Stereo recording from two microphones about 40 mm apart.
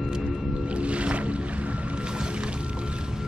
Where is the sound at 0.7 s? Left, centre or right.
Right.